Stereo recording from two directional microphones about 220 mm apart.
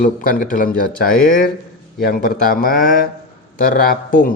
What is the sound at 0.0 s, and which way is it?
A man's voice, 40° left (ahead or behind).